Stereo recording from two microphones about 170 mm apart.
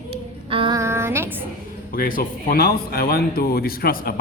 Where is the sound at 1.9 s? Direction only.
55° left (ahead or behind).